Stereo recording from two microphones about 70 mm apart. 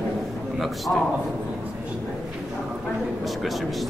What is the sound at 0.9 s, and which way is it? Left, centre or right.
Speech, centre.